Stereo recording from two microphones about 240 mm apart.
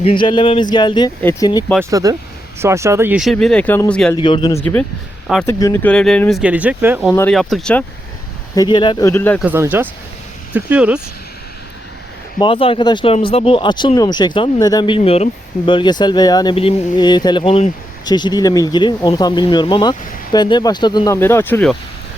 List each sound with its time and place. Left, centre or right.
0.0 s speech: left
1.8 s speech: centre
4.2 s speech: centre
4.6 s speech: centre
7.1 s speech: centre
8.5 s speech: centre
9.4 s speech: centre
12.4 s speech: left; by 21.8 s centre